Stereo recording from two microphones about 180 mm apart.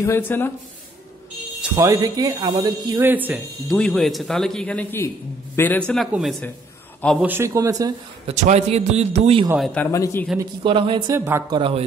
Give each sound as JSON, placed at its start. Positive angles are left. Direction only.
{"t": 0.0, "sound": "speech", "side_deg": 10}
{"t": 1.8, "sound": "speech", "side_deg": -20}
{"t": 3.0, "sound": "a man's voice", "side_deg": -10}
{"t": 3.6, "sound": "speech", "side_deg": 0}
{"t": 7.2, "sound": "a man's voice", "side_deg": -10}
{"t": 8.3, "sound": "a man's voice", "side_deg": -40}
{"t": 9.6, "sound": "speech", "side_deg": 5}
{"t": 9.8, "sound": "speech", "side_deg": 15}
{"t": 10.6, "sound": "speech", "side_deg": -30}
{"t": 11.1, "sound": "a man's voice", "side_deg": -15}
{"t": 11.5, "sound": "speech", "side_deg": -30}